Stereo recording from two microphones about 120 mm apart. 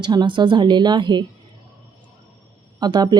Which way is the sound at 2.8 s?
35° right (ahead or behind).